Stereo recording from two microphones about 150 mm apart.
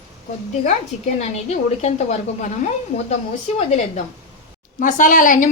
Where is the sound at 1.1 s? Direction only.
45° left (ahead or behind).